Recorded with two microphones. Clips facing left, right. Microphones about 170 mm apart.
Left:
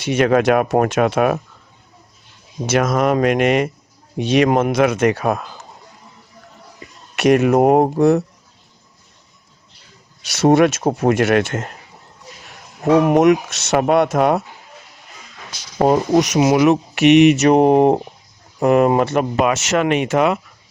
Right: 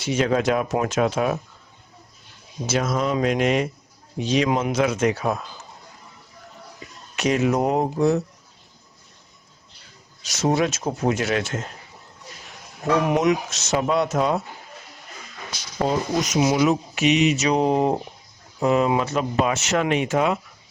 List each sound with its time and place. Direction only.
0.0 s speech: 60° left (ahead or behind)
2.6 s speech: 60° left (ahead or behind)
7.2 s speech: 60° left (ahead or behind)
10.3 s speech: 65° left (ahead or behind)
12.8 s speech: 45° left (ahead or behind); by 14.4 s 60° left (ahead or behind)
15.8 s speech: 55° left (ahead or behind)